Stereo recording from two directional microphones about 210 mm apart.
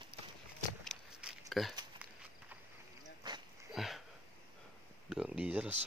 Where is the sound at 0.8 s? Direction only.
Centre (ahead or behind).